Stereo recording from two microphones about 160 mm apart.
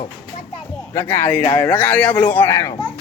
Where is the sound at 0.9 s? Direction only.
15° left (ahead or behind).